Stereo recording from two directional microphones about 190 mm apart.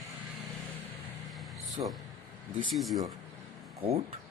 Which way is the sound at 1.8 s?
30° right (ahead or behind).